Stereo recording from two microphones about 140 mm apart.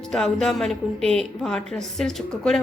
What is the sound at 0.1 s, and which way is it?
A woman's voice, 5° left (ahead or behind).